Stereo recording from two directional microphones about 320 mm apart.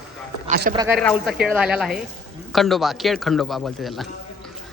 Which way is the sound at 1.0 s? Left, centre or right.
Centre.